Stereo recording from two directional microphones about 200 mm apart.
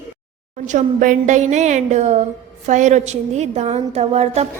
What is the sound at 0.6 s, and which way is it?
A woman's voice, 40° right (ahead or behind).